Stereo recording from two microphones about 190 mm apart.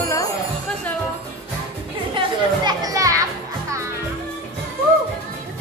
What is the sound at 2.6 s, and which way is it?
Children playing, 20° right (ahead or behind).